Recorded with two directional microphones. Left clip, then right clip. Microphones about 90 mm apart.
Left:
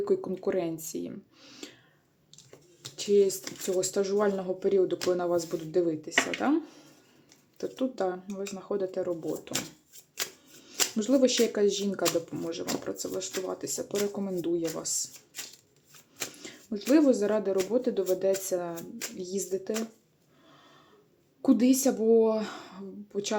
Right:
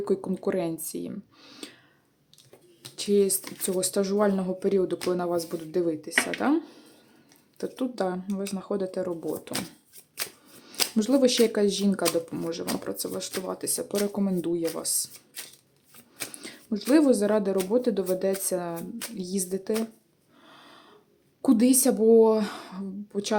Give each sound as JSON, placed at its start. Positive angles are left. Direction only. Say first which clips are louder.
{"t": 0.0, "sound": "speech", "louder": "right 1 dB", "side_deg": -25}
{"t": 2.9, "sound": "speech", "louder": "even", "side_deg": -30}
{"t": 7.6, "sound": "speech", "louder": "right 1 dB", "side_deg": -30}
{"t": 10.9, "sound": "speech", "louder": "right 2 dB", "side_deg": -35}
{"t": 16.7, "sound": "speech", "louder": "right 2 dB", "side_deg": -30}
{"t": 20.5, "sound": "snort", "louder": "right 6 dB", "side_deg": -65}
{"t": 21.4, "sound": "a woman's voice", "louder": "right 2 dB", "side_deg": -35}